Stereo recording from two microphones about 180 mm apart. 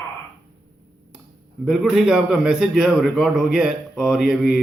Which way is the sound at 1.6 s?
Centre (ahead or behind).